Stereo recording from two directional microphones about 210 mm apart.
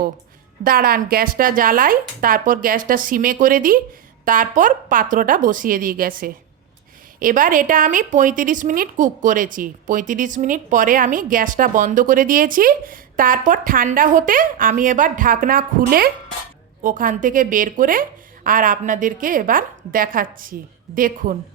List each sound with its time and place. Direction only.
0.6 s speech: 45° right (ahead or behind)